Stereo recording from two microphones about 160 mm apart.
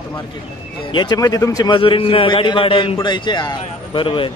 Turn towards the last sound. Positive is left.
turn(degrees=30)  # may be behind; listen again after turning